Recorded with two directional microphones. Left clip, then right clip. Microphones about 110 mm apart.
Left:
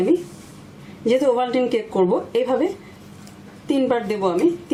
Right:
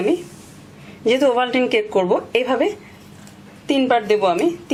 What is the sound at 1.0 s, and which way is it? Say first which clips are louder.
A woman's voice: right 2 dB; 40° right (ahead or behind).